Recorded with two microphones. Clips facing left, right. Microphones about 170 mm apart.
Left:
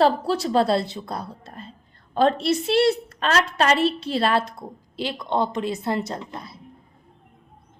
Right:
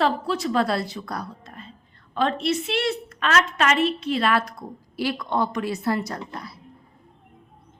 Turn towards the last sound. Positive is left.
turn(degrees=20)  # may be behind; listen again after turning